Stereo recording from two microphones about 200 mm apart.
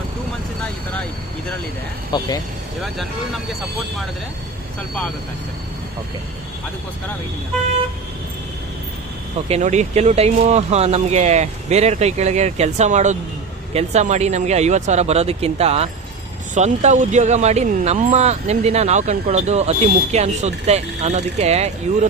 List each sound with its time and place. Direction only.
2.1 s speech: 20° left (ahead or behind)
2.8 s speech: centre (ahead or behind)
9.5 s speech: 35° right (ahead or behind)